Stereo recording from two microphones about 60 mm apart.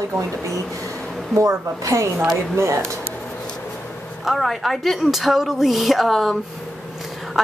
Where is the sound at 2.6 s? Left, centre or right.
Right.